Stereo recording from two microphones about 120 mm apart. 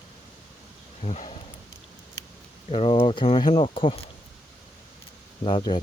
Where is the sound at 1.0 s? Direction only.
70° left (ahead or behind).